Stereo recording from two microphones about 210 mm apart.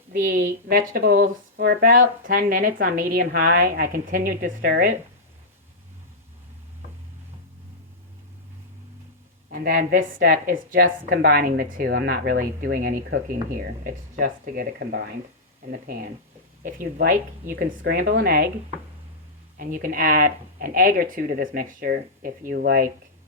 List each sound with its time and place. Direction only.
0.1 s speech: 45° right (ahead or behind)
9.5 s a woman's voice: 45° right (ahead or behind)
11.8 s speech: 55° right (ahead or behind)
17.5 s speech: 40° right (ahead or behind)
19.5 s speech: 40° right (ahead or behind)